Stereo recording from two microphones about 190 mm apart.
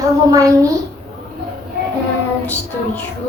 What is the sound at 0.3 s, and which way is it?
Speech, 20° right (ahead or behind).